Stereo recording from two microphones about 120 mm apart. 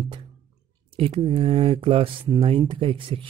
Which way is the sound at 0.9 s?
55° right (ahead or behind).